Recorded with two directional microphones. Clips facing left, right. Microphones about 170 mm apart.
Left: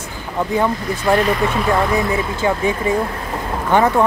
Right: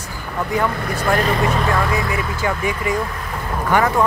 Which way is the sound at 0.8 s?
55° right (ahead or behind).